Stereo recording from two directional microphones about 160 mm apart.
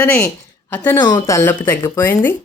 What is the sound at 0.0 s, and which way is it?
Speech, 15° left (ahead or behind).